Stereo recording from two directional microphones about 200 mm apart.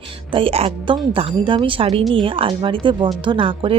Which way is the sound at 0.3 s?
25° right (ahead or behind).